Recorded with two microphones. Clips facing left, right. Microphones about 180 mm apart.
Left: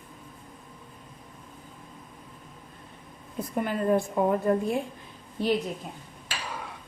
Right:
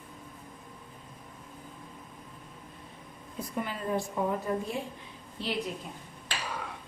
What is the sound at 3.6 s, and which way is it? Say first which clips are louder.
A woman's voice: left 10 dB; 55° left (ahead or behind).